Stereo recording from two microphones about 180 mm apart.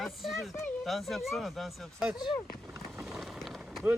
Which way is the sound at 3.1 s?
Centre (ahead or behind).